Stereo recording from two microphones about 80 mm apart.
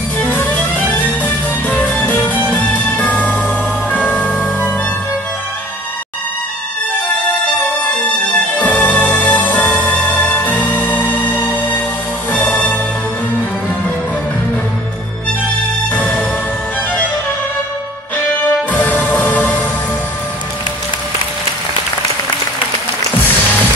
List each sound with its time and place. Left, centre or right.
0.2 s music: left
8.5 s music: centre
15.9 s music: centre
18.7 s music: left